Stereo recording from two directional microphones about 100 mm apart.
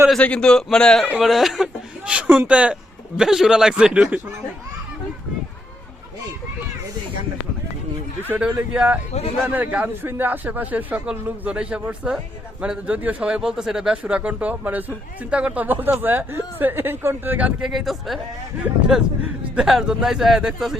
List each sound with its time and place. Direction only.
0.2 s a man's voice: 10° left (ahead or behind)
1.2 s speech: centre (ahead or behind)
8.3 s speech: 15° right (ahead or behind)
17.6 s speech: centre (ahead or behind)